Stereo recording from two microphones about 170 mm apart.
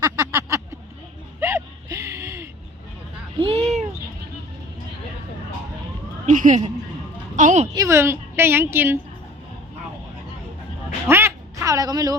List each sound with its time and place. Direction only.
0.0 s a sound: 20° right (ahead or behind)
1.4 s gasp: 15° right (ahead or behind)
3.4 s a sound: 35° right (ahead or behind)
6.2 s speech: 50° right (ahead or behind)
7.7 s a woman's voice: 20° right (ahead or behind)
11.1 s quack: 15° right (ahead or behind)